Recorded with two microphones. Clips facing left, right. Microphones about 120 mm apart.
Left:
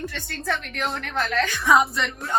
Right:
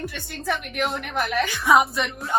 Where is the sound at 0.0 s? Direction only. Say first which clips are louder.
Right 1 dB; 15° right (ahead or behind).